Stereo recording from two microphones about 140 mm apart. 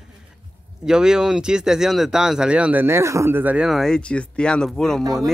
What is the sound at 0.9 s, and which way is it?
Speech, 5° right (ahead or behind).